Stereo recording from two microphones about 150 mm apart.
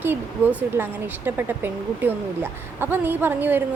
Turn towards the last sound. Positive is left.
turn(degrees=-15)  # may be behind; listen again after turning